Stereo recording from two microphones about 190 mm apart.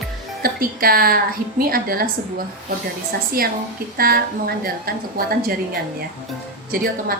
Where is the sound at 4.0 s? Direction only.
50° right (ahead or behind).